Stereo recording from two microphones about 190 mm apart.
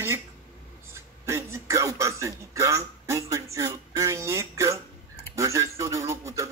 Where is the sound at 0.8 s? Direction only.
15° right (ahead or behind).